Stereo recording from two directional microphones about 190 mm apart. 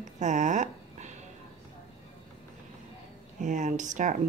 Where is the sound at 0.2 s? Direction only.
40° right (ahead or behind).